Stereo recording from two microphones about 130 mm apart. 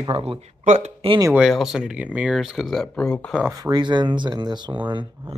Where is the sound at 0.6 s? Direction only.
70° right (ahead or behind).